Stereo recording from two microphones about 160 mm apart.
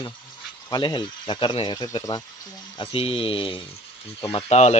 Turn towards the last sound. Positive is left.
turn(degrees=45)  # may be behind; listen again after turning